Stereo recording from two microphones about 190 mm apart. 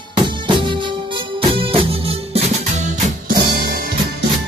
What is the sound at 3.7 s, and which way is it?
Music, 50° right (ahead or behind).